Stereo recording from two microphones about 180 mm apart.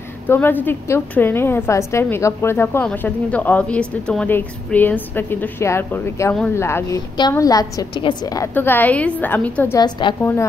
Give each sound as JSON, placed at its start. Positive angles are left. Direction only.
{"t": 0.3, "sound": "a woman's voice", "side_deg": 10}
{"t": 9.8, "sound": "a woman's voice", "side_deg": 25}